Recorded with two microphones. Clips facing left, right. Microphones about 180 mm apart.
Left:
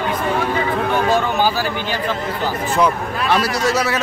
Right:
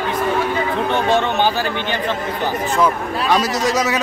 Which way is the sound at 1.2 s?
20° right (ahead or behind).